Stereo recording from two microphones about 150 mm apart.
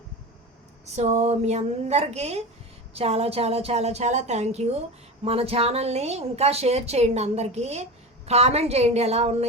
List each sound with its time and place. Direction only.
0.9 s a woman's voice: 50° right (ahead or behind)